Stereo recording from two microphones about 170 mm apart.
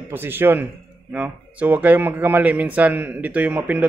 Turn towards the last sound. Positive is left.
turn(degrees=-10)  # may be behind; listen again after turning